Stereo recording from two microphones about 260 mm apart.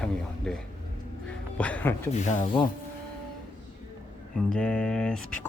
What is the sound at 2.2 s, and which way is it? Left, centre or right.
Speech, left.